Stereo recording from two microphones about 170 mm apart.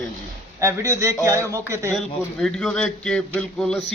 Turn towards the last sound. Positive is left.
turn(degrees=5)  # may be behind; listen again after turning